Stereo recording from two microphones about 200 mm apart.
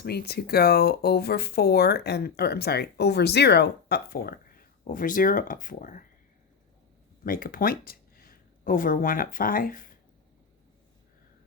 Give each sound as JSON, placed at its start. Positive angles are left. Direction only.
{"t": 0.0, "sound": "speech", "side_deg": 55}
{"t": 7.3, "sound": "speech", "side_deg": 45}